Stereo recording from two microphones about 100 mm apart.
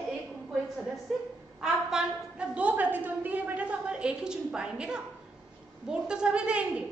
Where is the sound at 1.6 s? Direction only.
5° right (ahead or behind).